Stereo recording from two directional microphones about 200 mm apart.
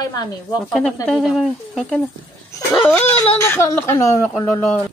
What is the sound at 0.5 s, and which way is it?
Speech, 5° left (ahead or behind).